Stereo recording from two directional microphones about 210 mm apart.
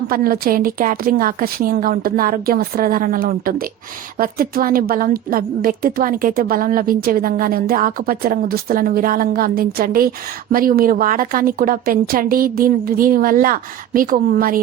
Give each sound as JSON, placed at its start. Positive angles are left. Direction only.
{"t": 0.1, "sound": "a woman's voice", "side_deg": -45}